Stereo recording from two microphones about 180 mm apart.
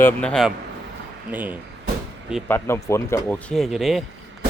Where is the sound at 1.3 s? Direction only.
10° right (ahead or behind).